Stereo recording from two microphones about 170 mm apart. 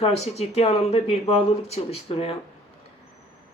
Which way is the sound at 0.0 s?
35° left (ahead or behind).